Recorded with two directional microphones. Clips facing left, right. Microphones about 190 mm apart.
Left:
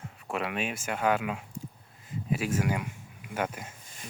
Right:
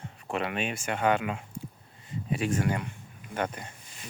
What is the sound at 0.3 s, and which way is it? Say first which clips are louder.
Speech: right 1 dB; centre (ahead or behind).